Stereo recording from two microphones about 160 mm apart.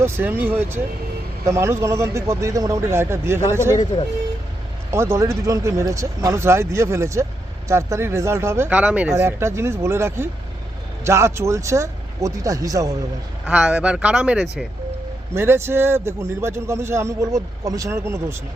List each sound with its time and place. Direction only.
0.0 s a man's voice: 10° right (ahead or behind)
4.9 s a man's voice: 15° right (ahead or behind)
13.4 s a man's voice: 5° right (ahead or behind)